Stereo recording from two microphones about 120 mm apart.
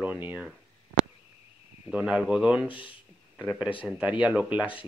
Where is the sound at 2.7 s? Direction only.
45° left (ahead or behind).